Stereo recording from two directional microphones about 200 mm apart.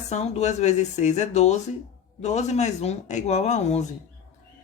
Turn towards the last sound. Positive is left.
turn(degrees=35)  # may be behind; listen again after turning